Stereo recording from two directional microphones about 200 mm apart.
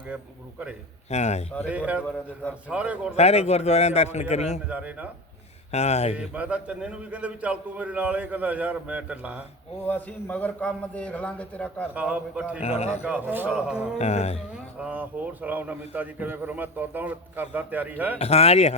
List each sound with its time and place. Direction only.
1.1 s a man's voice: 35° left (ahead or behind)
1.6 s a man's voice: 5° right (ahead or behind)
3.2 s a man's voice: 30° left (ahead or behind)
4.7 s a man's voice: 5° right (ahead or behind)
5.7 s a man's voice: 35° left (ahead or behind)
6.1 s a man's voice: 5° right (ahead or behind)
9.8 s a man's voice: 10° left (ahead or behind)
11.9 s a man's voice: 5° right (ahead or behind)
12.6 s a man's voice: 30° left (ahead or behind)
13.1 s a man's voice: 5° right (ahead or behind)
14.0 s a man's voice: 35° left (ahead or behind)
14.5 s a man's voice: 5° right (ahead or behind)
18.2 s a man's voice: 30° left (ahead or behind)